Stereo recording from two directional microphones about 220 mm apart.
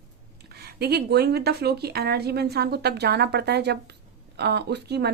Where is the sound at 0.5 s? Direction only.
45° right (ahead or behind).